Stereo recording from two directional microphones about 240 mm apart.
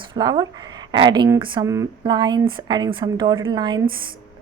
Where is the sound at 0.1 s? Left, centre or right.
Centre.